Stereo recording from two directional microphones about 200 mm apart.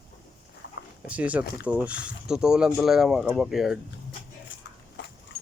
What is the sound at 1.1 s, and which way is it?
Speech, 5° right (ahead or behind).